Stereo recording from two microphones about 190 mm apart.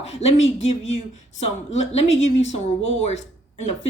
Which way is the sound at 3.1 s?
35° left (ahead or behind).